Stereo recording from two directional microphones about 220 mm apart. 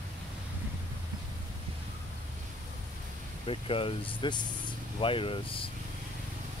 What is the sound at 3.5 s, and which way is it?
Speech, 25° left (ahead or behind).